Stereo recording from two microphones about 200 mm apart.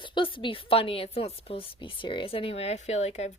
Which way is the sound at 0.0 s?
25° left (ahead or behind).